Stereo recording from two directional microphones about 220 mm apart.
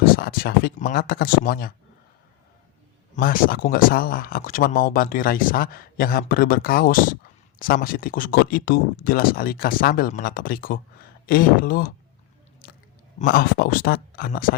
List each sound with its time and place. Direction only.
0.0 s speech: 40° left (ahead or behind)
3.2 s speech: 40° left (ahead or behind)
13.1 s speech: 40° left (ahead or behind)